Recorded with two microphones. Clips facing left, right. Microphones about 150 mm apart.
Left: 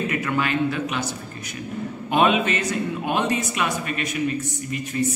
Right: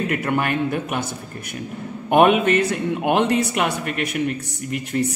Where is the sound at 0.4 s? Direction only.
55° right (ahead or behind).